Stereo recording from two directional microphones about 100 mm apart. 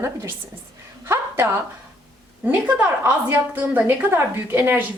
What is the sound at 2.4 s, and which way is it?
A woman's voice, 20° right (ahead or behind).